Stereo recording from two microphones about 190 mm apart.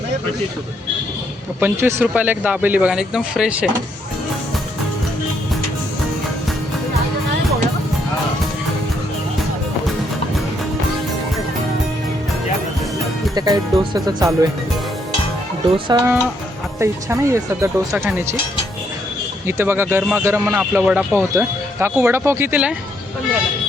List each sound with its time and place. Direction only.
1.5 s speech: 10° right (ahead or behind)
13.3 s speech: 20° right (ahead or behind)
15.9 s speech: 20° right (ahead or behind)
19.5 s speech: 10° right (ahead or behind)